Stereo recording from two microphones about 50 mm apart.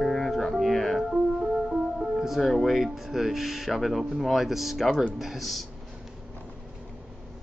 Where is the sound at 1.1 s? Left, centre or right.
Centre.